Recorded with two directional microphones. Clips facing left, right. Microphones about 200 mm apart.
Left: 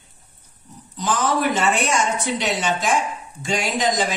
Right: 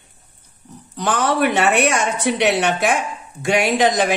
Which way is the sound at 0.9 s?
65° right (ahead or behind).